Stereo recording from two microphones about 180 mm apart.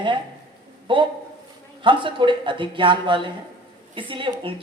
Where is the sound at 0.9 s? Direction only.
30° right (ahead or behind).